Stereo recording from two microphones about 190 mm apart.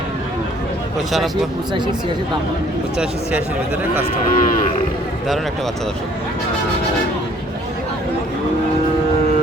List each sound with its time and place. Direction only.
4.4 s cattle: 45° left (ahead or behind)